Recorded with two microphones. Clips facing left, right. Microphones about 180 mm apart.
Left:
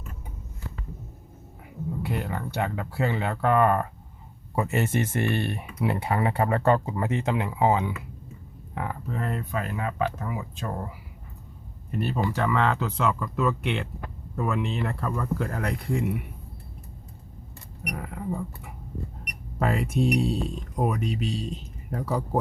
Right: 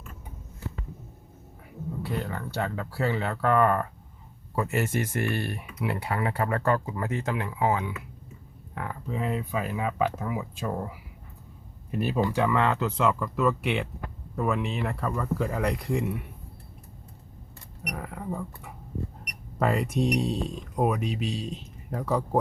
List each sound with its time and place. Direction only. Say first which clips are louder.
2.0 s speech: left 1 dB; 20° left (ahead or behind)
9.0 s speech: right 1 dB; 5° right (ahead or behind)
11.9 s speech: right 1 dB; 5° right (ahead or behind)
17.8 s speech: left 2 dB; 5° left (ahead or behind)